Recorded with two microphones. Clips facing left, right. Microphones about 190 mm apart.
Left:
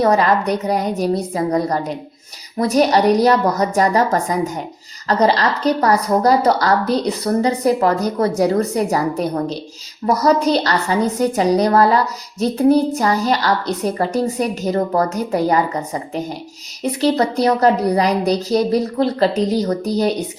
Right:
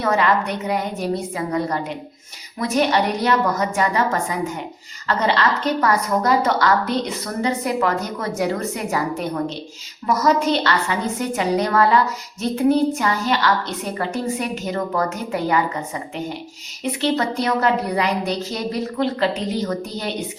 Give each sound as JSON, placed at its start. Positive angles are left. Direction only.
{"t": 0.0, "sound": "a woman's voice", "side_deg": 35}